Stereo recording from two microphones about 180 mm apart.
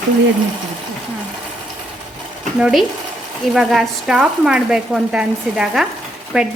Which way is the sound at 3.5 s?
Centre (ahead or behind).